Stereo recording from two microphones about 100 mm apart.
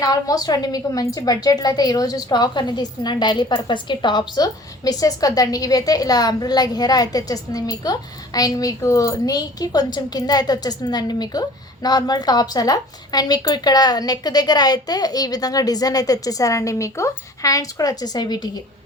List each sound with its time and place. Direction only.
0.0 s a woman's voice: 40° left (ahead or behind)